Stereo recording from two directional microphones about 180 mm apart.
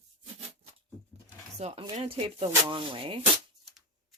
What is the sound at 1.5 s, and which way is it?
Speech, 35° right (ahead or behind).